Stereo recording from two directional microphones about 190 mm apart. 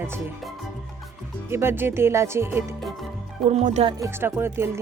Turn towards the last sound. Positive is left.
turn(degrees=-15)  # may be behind; listen again after turning